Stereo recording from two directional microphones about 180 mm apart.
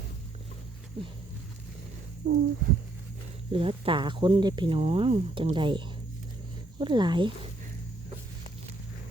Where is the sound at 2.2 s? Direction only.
70° right (ahead or behind).